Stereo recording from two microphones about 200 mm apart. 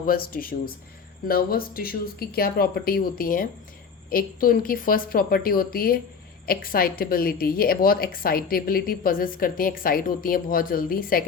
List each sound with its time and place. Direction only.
0.0 s speech: 45° left (ahead or behind)